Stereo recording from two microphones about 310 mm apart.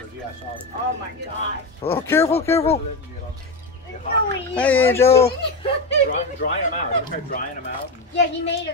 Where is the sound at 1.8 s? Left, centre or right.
Centre.